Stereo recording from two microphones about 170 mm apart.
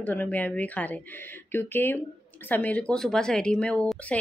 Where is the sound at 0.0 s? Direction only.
10° left (ahead or behind).